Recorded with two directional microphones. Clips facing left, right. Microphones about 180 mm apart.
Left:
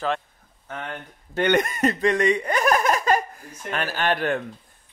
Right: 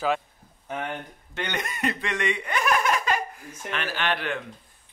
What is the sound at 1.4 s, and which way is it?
A man's voice, 50° left (ahead or behind).